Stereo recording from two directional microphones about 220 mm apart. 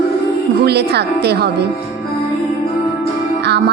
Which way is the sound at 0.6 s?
50° right (ahead or behind).